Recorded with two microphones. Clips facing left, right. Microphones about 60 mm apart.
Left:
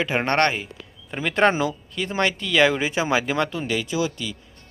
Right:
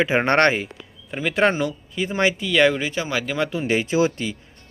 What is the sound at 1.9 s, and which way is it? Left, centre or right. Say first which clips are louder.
Speech: right 5 dB; centre.